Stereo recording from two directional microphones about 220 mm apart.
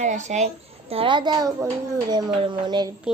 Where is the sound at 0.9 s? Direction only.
25° right (ahead or behind).